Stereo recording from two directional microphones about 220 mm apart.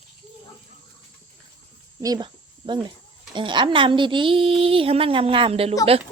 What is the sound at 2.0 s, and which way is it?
Speech, 20° right (ahead or behind).